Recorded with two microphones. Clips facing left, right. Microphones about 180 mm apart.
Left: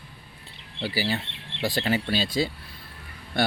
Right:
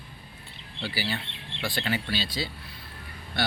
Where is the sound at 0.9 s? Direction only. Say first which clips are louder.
Left 5 dB; 40° left (ahead or behind).